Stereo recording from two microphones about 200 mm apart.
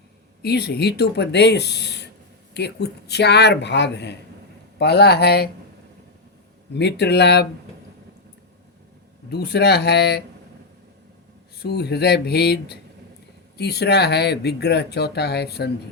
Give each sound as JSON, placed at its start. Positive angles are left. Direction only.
{"t": 0.4, "sound": "speech", "side_deg": 55}
{"t": 6.7, "sound": "speech", "side_deg": 55}
{"t": 9.3, "sound": "speech", "side_deg": 55}
{"t": 11.5, "sound": "speech", "side_deg": 55}